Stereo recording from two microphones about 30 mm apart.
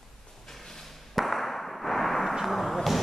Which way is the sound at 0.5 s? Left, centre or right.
Centre.